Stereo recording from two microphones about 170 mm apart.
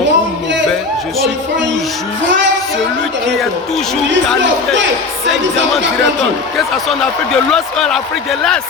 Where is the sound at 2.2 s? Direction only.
90° right.